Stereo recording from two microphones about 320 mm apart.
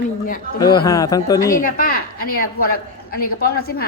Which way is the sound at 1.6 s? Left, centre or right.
Left.